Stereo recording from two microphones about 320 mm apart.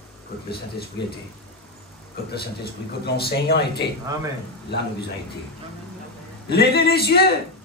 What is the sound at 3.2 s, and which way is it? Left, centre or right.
Speech, left.